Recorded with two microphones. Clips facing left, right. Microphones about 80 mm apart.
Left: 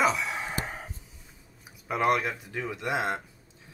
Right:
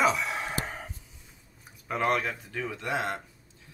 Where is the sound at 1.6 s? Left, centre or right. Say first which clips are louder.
Left 2 dB; centre.